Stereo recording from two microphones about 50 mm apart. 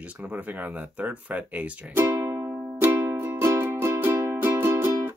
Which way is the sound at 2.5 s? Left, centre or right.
Right.